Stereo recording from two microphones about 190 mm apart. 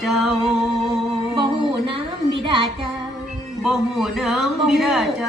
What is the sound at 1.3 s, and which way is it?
Singing, 25° right (ahead or behind).